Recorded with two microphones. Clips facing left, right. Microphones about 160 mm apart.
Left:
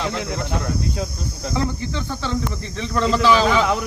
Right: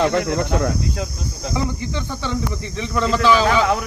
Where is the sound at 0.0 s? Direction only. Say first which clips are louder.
Right 7 dB; 65° right (ahead or behind).